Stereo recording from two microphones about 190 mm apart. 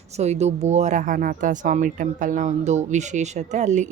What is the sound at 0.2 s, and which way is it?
Speech, 35° right (ahead or behind).